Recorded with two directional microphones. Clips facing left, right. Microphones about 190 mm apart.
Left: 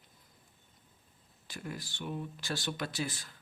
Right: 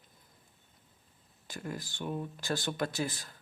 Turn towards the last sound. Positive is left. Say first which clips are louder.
# right 3 dB
turn(degrees=-45)  # may be behind; listen again after turning